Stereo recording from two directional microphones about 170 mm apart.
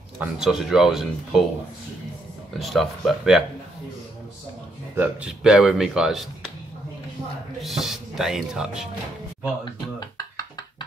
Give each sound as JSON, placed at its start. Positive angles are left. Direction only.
{"t": 0.2, "sound": "speech", "side_deg": -5}
{"t": 2.6, "sound": "speech", "side_deg": 0}
{"t": 4.9, "sound": "speech", "side_deg": -10}
{"t": 7.6, "sound": "speech", "side_deg": 0}
{"t": 9.9, "sound": "beatboxing", "side_deg": 20}